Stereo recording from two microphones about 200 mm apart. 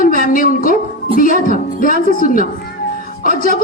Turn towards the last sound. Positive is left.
turn(degrees=45)  # may be behind; listen again after turning